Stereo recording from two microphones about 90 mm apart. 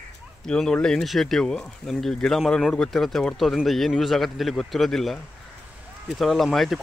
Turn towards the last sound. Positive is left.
turn(degrees=0)  # may be behind; listen again after turning